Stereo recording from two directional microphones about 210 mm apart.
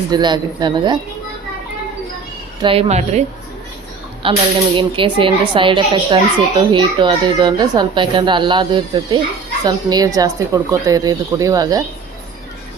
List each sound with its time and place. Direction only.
0.1 s speech: 20° right (ahead or behind)
2.6 s speech: 25° right (ahead or behind)